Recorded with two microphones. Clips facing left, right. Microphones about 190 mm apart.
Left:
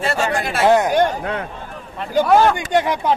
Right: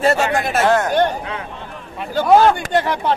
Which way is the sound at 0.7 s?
15° left (ahead or behind).